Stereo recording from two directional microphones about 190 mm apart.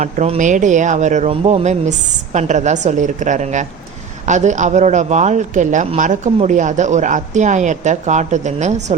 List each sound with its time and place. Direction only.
0.0 s speech: 40° right (ahead or behind)